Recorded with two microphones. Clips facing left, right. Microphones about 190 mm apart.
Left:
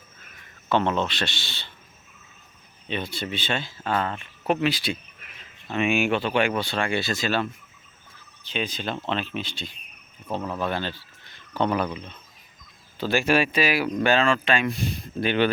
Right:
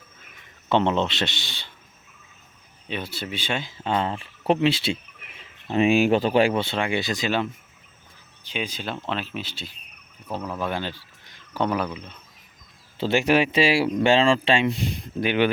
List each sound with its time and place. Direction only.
0.7 s speech: 20° right (ahead or behind)
2.9 s speech: 5° right (ahead or behind)
8.4 s speech: 10° right (ahead or behind)
10.7 s speech: 15° right (ahead or behind)
13.0 s speech: 25° right (ahead or behind)
15.2 s speech: 15° right (ahead or behind)